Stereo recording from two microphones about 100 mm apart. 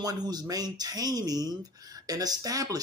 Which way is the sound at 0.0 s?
40° right (ahead or behind).